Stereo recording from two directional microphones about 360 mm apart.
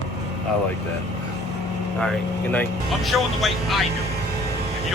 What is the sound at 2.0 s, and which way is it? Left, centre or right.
Speech, centre.